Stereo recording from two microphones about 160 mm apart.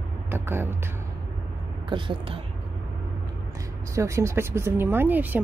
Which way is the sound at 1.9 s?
30° right (ahead or behind).